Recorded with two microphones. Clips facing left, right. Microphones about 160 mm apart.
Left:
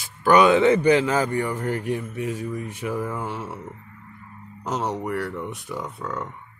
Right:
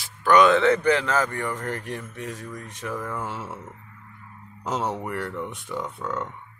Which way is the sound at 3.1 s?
Centre (ahead or behind).